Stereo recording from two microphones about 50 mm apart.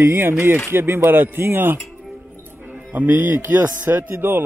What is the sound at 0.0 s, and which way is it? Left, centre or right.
Speech, right.